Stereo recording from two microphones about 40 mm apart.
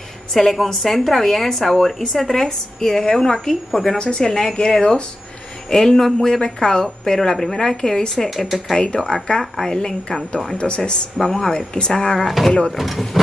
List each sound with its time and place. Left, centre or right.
0.3 s a woman's voice: centre
8.3 s speech: centre
8.7 s a woman's voice: centre
10.6 s speech: left
11.1 s speech: centre
12.2 s speech: centre